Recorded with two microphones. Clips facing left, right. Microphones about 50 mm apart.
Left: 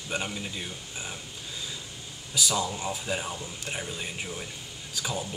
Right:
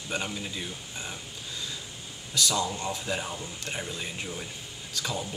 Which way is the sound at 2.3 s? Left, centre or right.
Centre.